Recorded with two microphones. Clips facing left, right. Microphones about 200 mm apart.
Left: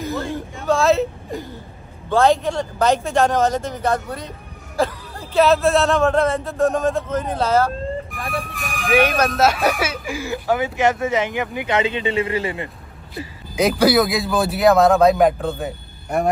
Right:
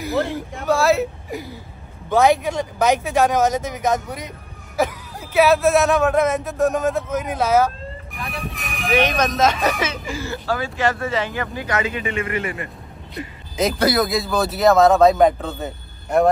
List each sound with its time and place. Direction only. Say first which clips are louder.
0.1 s speech: right 7 dB; 75° right (ahead or behind)
0.7 s a man's voice: left 1 dB; centre (ahead or behind)
4.7 s a sound: even; 15° right (ahead or behind)
5.7 s a man's voice: even; 15° right (ahead or behind)
8.1 s music: left 3 dB; centre (ahead or behind)
8.9 s speech: left 2 dB; 10° left (ahead or behind); by 12.6 s 25° left (ahead or behind)
13.6 s speech: left 3 dB; centre (ahead or behind)